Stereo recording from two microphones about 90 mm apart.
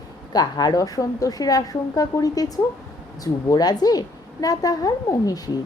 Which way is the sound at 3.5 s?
45° left (ahead or behind).